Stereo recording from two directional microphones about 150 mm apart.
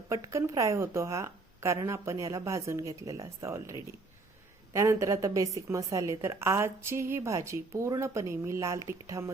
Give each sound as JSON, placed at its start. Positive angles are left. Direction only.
{"t": 0.1, "sound": "a woman's voice", "side_deg": -20}